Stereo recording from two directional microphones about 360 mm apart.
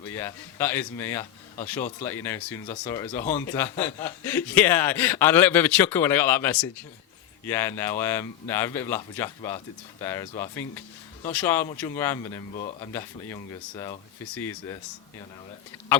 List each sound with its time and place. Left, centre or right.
0.1 s a man's voice: centre